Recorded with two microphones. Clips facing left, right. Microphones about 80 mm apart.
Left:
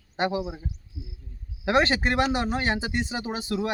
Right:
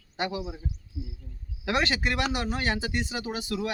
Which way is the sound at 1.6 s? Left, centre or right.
Left.